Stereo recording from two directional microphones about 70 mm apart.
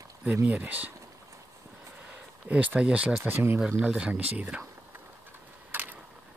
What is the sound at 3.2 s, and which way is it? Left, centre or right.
Speech, right.